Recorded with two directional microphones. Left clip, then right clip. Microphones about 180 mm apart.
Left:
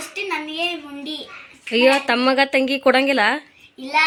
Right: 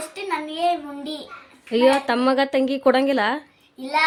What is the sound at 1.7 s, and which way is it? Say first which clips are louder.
A woman's voice: left 2 dB; 5° right (ahead or behind).